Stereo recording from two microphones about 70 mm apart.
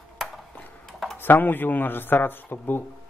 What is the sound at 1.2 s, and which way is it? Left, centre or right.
Speech, left.